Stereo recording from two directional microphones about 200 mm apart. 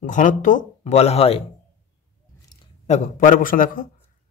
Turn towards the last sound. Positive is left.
turn(degrees=45)  # may be behind; listen again after turning